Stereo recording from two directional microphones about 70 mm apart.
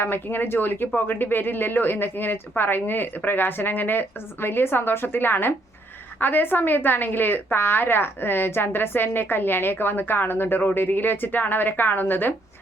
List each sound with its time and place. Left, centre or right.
0.0 s a woman's voice: left